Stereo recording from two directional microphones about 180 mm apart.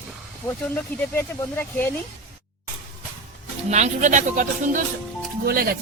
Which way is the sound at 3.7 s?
40° right (ahead or behind).